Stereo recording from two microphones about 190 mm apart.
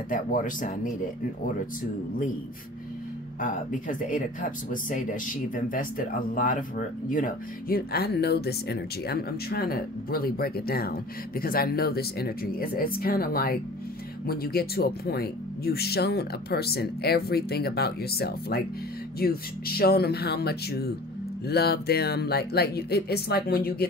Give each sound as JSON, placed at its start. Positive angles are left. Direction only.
{"t": 0.1, "sound": "speech", "side_deg": 45}
{"t": 3.3, "sound": "speech", "side_deg": 45}